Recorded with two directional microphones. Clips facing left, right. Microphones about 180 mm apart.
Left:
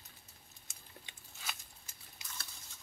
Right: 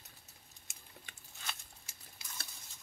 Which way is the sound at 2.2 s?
20° left (ahead or behind).